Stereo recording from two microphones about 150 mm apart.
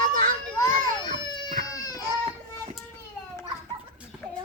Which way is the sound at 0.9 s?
30° left (ahead or behind).